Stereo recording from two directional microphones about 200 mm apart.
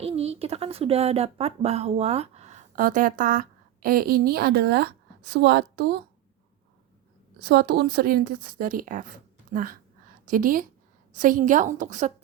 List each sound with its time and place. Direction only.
0.0 s a woman's voice: 30° right (ahead or behind); by 6.0 s 55° right (ahead or behind)
7.4 s a woman's voice: 55° right (ahead or behind); by 12.1 s 40° right (ahead or behind)